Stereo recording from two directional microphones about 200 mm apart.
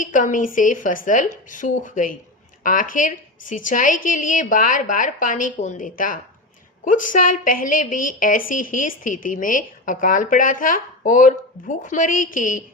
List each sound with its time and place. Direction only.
0.0 s a woman's voice: 40° left (ahead or behind)